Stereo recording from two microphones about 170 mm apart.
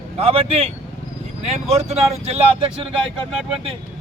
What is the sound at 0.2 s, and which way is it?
Speech, 35° right (ahead or behind).